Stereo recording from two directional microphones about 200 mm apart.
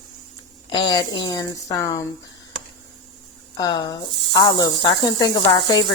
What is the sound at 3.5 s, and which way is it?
Speech, 20° left (ahead or behind).